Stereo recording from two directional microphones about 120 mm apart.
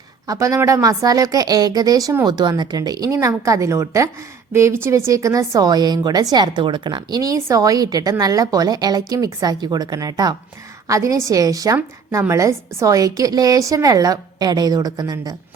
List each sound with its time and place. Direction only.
0.3 s a woman's voice: 25° right (ahead or behind)
7.2 s a woman's voice: 25° right (ahead or behind)